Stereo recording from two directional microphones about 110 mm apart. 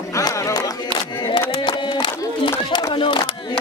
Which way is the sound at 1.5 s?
45° left (ahead or behind).